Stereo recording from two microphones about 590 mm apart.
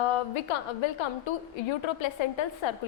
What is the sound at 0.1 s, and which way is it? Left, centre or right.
A woman's voice, left.